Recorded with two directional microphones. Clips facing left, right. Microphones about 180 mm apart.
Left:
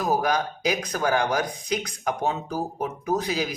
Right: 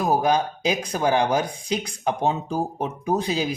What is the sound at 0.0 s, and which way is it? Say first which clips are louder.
Speech: right 3 dB; 25° right (ahead or behind).